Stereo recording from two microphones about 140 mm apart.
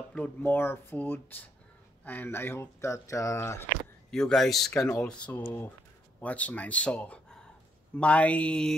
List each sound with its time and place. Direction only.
0.1 s speech: 10° left (ahead or behind)
4.1 s a man's voice: 5° left (ahead or behind)
4.7 s speech: 20° left (ahead or behind)
5.0 s speech: 10° left (ahead or behind)